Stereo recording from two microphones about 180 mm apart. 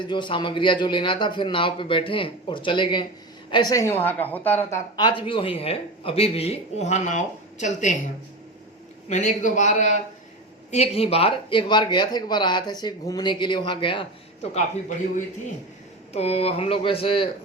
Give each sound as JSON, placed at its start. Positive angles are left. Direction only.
{"t": 0.0, "sound": "speech", "side_deg": 25}
{"t": 4.9, "sound": "speech", "side_deg": 25}
{"t": 9.0, "sound": "a man's voice", "side_deg": 40}
{"t": 14.5, "sound": "a man's voice", "side_deg": 45}